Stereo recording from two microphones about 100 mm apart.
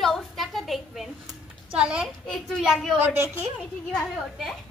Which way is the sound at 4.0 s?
Centre (ahead or behind).